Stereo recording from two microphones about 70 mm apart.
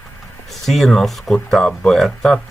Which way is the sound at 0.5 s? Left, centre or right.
Centre.